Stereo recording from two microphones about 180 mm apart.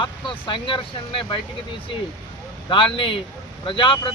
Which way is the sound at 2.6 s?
30° left (ahead or behind).